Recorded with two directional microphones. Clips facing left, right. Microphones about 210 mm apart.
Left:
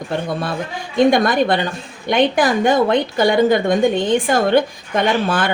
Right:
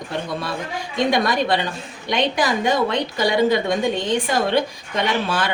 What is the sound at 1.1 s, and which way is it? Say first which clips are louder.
A woman's voice: left 4 dB; 50° left (ahead or behind).